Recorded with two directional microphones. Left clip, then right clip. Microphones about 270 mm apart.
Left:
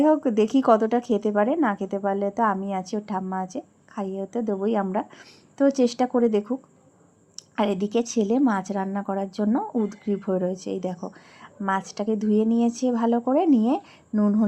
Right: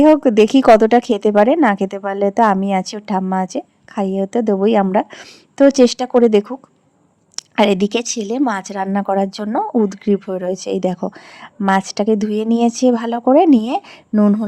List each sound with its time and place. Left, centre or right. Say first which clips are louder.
0.0 s speech: right 10 dB; right